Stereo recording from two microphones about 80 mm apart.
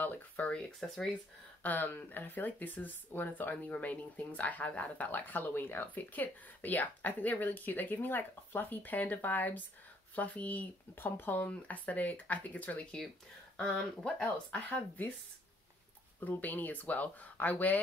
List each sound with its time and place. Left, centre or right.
0.0 s a sound: centre
0.7 s speech: centre
1.6 s speech: left
16.2 s speech: left